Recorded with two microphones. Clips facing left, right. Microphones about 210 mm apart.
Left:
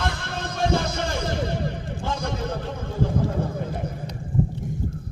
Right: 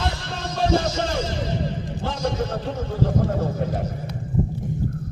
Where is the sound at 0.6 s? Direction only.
55° left (ahead or behind).